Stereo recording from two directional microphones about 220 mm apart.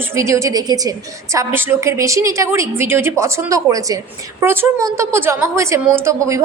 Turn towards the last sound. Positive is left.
turn(degrees=-10)  # may be behind; listen again after turning